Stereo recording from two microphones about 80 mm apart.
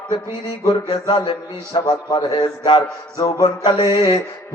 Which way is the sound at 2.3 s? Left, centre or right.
Left.